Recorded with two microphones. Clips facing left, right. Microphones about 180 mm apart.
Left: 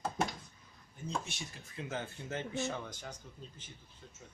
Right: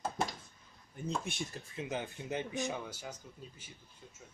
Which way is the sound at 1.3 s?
55° right (ahead or behind).